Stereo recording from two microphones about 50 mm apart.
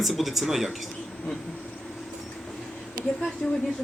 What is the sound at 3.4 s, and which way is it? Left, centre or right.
Speech, centre.